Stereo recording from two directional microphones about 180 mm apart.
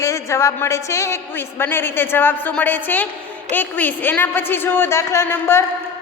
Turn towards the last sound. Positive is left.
turn(degrees=15)  # may be behind; listen again after turning